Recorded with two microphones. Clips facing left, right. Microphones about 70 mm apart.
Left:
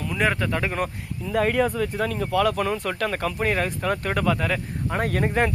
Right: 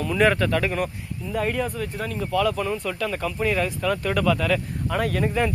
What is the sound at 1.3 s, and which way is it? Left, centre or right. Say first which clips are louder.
Speech: left 4 dB; left.